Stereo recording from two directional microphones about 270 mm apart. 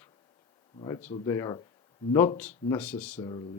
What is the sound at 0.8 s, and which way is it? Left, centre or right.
Speech, centre.